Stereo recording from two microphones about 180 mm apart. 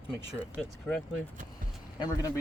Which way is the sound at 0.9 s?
5° left (ahead or behind).